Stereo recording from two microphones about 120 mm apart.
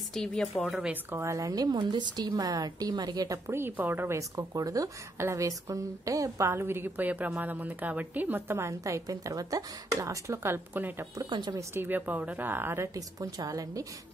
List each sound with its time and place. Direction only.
0.1 s speech: 5° left (ahead or behind)
1.1 s a woman's voice: 25° right (ahead or behind)
11.2 s speech: 40° right (ahead or behind)
11.5 s a woman's voice: 20° right (ahead or behind)